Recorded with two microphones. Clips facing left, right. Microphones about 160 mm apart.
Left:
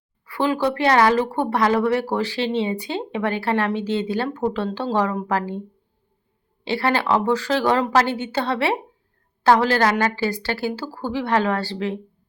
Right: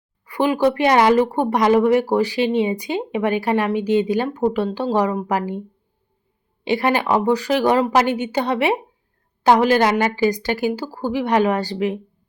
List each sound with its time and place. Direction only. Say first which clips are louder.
0.3 s speech: right 4 dB; 15° right (ahead or behind)
6.7 s speech: right 2 dB; 15° right (ahead or behind)